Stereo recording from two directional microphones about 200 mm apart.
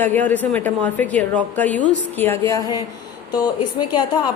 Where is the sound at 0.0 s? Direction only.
10° left (ahead or behind).